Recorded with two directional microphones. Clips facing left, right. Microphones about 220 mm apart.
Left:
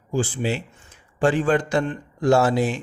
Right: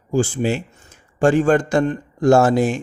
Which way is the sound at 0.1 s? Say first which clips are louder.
Right 5 dB; 45° right (ahead or behind).